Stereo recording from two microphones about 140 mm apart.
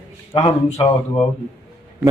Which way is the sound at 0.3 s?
30° left (ahead or behind).